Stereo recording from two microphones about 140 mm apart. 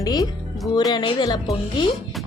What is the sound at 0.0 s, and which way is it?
Music, 25° left (ahead or behind).